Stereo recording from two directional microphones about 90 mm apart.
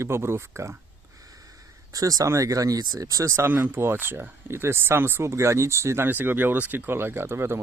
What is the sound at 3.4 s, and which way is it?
Speech, 25° right (ahead or behind).